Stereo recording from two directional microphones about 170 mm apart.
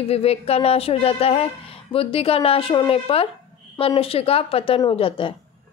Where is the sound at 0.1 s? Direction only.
35° left (ahead or behind).